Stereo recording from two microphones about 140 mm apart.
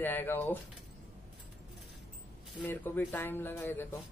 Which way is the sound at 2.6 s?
15° left (ahead or behind).